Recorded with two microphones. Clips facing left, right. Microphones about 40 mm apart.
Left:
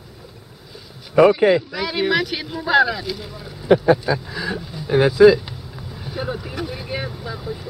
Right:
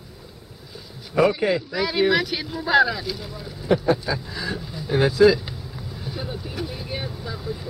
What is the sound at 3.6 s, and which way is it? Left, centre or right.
Speech, left.